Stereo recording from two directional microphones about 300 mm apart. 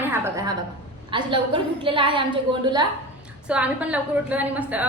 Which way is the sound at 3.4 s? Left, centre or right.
Centre.